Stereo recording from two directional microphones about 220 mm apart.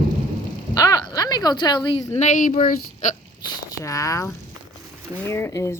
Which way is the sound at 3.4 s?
15° left (ahead or behind).